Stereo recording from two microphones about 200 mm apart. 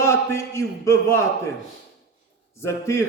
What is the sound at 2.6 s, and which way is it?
Speech, 15° left (ahead or behind).